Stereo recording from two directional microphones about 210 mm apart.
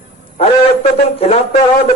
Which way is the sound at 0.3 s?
30° left (ahead or behind).